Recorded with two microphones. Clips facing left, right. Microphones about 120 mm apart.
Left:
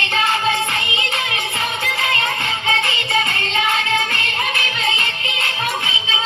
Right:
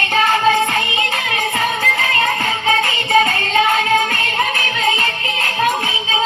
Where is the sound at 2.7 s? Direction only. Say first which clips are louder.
Right 6 dB; 40° right (ahead or behind).